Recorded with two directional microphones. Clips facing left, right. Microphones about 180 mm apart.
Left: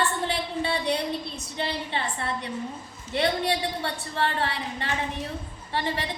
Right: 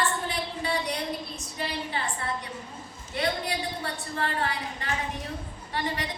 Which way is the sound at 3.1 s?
30° left (ahead or behind).